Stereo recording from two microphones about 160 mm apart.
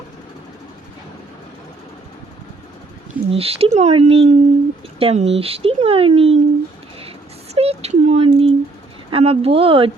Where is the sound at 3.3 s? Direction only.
40° right (ahead or behind).